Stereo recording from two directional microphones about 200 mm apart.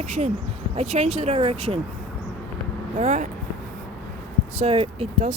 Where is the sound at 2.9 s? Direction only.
40° right (ahead or behind).